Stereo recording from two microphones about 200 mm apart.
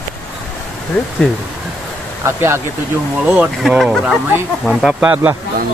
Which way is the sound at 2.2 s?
10° right (ahead or behind).